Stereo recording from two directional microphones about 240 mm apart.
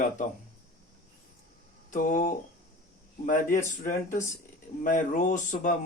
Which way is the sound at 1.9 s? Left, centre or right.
Left.